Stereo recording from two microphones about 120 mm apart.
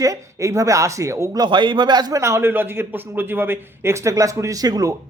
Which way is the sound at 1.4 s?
40° right (ahead or behind).